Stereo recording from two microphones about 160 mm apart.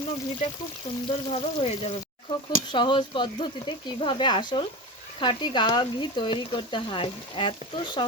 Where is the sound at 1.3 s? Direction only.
40° left (ahead or behind).